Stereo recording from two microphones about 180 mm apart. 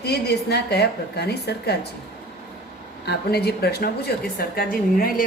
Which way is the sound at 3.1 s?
65° left (ahead or behind).